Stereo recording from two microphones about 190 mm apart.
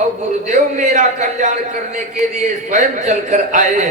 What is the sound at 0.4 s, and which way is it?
A man's voice, 40° right (ahead or behind).